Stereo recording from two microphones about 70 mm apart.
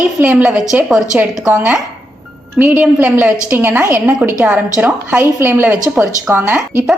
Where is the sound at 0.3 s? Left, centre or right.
Centre.